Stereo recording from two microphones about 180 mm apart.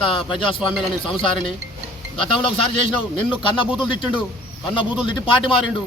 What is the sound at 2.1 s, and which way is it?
Speech, 30° left (ahead or behind).